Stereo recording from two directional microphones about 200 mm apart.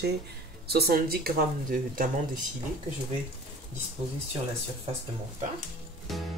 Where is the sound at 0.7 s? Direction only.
50° right (ahead or behind).